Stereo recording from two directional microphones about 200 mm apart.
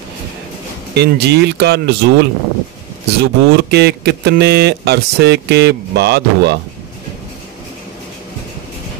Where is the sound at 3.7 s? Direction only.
55° right (ahead or behind).